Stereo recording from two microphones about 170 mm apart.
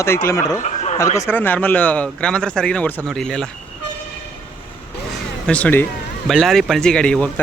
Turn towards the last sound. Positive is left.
turn(degrees=5)  # may be behind; listen again after turning